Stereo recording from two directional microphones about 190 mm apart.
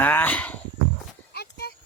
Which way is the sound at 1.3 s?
55° left (ahead or behind).